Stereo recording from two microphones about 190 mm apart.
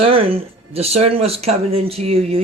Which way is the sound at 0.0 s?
30° right (ahead or behind).